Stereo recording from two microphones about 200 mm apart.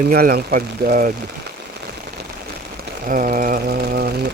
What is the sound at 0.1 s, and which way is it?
Speech, 50° right (ahead or behind).